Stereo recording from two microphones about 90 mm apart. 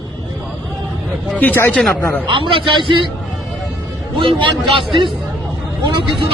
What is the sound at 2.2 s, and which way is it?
Speech, 70° right (ahead or behind).